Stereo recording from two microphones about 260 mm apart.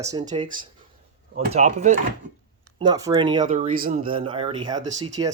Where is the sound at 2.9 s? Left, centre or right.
Centre.